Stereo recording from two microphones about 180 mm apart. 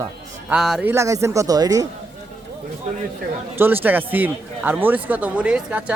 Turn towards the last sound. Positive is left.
turn(degrees=-5)  # may be behind; listen again after turning